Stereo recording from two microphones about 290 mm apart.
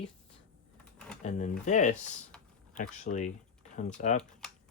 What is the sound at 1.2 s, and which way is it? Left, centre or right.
Speech, left.